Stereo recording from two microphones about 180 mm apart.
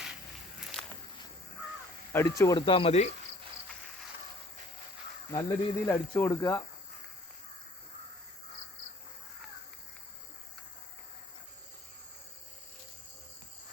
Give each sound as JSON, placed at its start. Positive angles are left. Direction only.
{"t": 0.8, "sound": "walk", "side_deg": 5}
{"t": 2.1, "sound": "speech", "side_deg": 15}
{"t": 5.3, "sound": "speech", "side_deg": 20}